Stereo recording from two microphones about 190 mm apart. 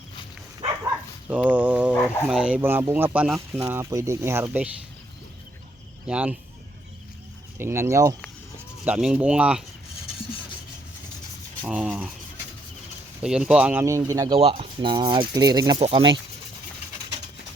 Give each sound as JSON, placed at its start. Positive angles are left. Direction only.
{"t": 1.3, "sound": "speech", "side_deg": -5}
{"t": 1.9, "sound": "speech", "side_deg": 10}
{"t": 2.3, "sound": "speech", "side_deg": -5}
{"t": 6.1, "sound": "speech", "side_deg": -5}
{"t": 7.6, "sound": "speech", "side_deg": -15}
{"t": 8.8, "sound": "speech", "side_deg": -5}
{"t": 11.6, "sound": "speech", "side_deg": -5}
{"t": 13.2, "sound": "speech", "side_deg": -5}
{"t": 14.3, "sound": "cutlery", "side_deg": -30}